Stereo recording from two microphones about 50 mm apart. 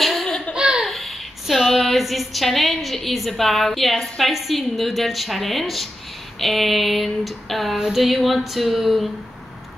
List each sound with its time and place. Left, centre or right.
0.0 s laughter: centre
0.6 s laughter: centre
0.8 s a woman's voice: centre
6.4 s female singing: centre